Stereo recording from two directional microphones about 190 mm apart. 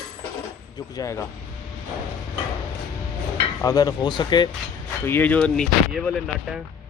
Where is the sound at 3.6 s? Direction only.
20° left (ahead or behind).